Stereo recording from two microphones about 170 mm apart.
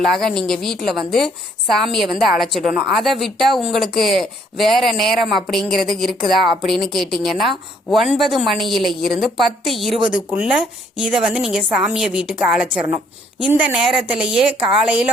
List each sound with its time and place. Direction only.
0.0 s a woman's voice: centre (ahead or behind)
13.7 s a woman's voice: 5° right (ahead or behind)